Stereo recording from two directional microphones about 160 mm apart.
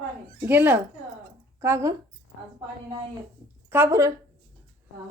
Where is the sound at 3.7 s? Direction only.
15° right (ahead or behind).